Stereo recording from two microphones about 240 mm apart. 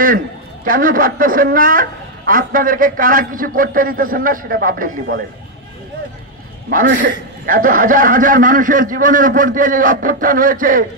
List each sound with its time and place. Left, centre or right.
0.7 s a man's voice: right
6.7 s a man's voice: right